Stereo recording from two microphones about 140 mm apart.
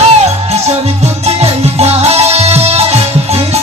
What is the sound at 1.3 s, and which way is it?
Music, 50° right (ahead or behind).